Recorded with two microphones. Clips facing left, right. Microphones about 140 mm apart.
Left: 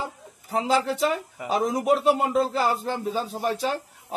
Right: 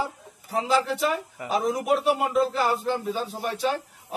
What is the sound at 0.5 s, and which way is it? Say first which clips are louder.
Speech: left 1 dB; 35° left (ahead or behind).